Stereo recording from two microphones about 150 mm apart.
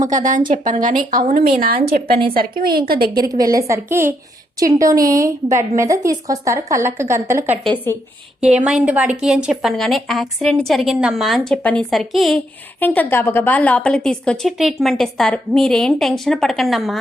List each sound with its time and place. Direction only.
0.2 s a woman's voice: 60° right (ahead or behind); by 2.8 s 75° right (ahead or behind)
3.2 s a woman's voice: 25° right (ahead or behind)
8.4 s a woman's voice: 5° right (ahead or behind)
12.8 s a woman's voice: 10° left (ahead or behind)